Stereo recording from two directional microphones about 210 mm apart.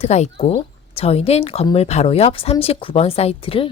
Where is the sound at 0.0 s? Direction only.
30° left (ahead or behind).